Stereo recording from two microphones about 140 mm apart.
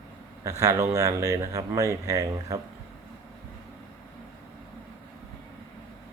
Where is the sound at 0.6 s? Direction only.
20° right (ahead or behind).